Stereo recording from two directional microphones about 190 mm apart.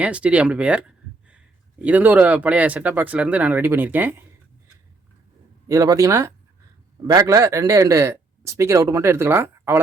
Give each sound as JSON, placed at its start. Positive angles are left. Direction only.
{"t": 0.0, "sound": "speech", "side_deg": -5}
{"t": 5.6, "sound": "speech", "side_deg": -15}